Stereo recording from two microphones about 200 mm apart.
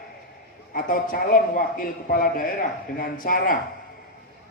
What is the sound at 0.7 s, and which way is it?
A man's voice, 45° left (ahead or behind).